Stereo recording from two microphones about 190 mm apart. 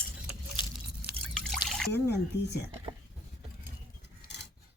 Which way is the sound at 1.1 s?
Centre (ahead or behind).